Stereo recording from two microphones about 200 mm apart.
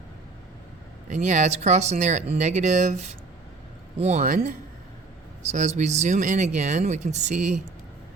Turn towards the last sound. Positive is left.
turn(degrees=-35)  # may be behind; listen again after turning